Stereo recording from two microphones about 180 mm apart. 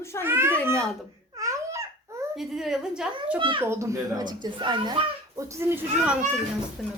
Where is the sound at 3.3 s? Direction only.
25° right (ahead or behind).